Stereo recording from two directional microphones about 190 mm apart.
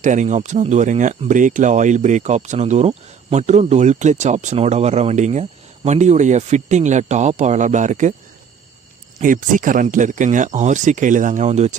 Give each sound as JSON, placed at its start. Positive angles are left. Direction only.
{"t": 0.0, "sound": "speech", "side_deg": -40}
{"t": 9.2, "sound": "speech", "side_deg": -45}